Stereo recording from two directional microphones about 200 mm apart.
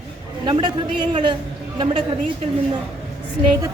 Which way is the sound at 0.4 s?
25° right (ahead or behind).